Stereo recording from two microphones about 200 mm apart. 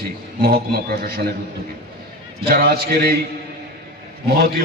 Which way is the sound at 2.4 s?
50° right (ahead or behind).